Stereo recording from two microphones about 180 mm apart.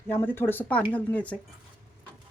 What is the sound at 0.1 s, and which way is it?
A woman's voice, 10° left (ahead or behind).